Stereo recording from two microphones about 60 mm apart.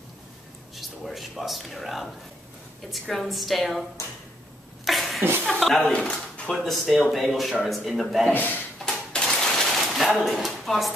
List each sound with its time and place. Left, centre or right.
0.7 s speech: centre
4.8 s a sound: centre
5.5 s speech: centre
5.8 s speech: centre
6.5 s speech: centre
8.3 s speech: left
9.1 s typewriter: centre
9.8 s a sound: centre